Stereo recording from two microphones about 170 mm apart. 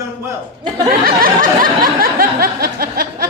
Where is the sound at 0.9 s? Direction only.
60° right (ahead or behind).